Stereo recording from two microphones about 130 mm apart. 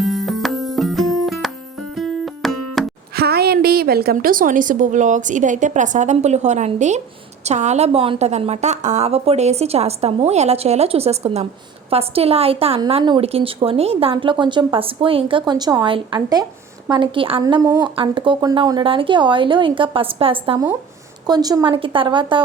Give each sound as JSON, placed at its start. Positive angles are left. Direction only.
{"t": 0.0, "sound": "music", "side_deg": 0}
{"t": 4.1, "sound": "a woman's voice", "side_deg": -90}
{"t": 8.3, "sound": "a woman's voice", "side_deg": -55}
{"t": 17.4, "sound": "speech", "side_deg": -30}
{"t": 21.2, "sound": "speech", "side_deg": -30}